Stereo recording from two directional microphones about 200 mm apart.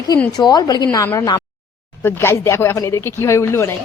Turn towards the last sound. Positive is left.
turn(degrees=15)  # may be behind; listen again after turning